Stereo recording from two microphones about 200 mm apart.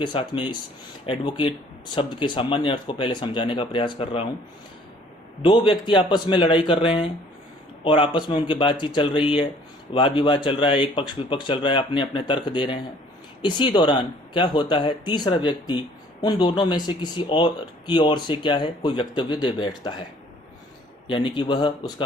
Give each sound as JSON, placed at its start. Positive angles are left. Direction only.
{"t": 0.0, "sound": "speech", "side_deg": 25}
{"t": 5.4, "sound": "speech", "side_deg": 25}
{"t": 21.1, "sound": "speech", "side_deg": 25}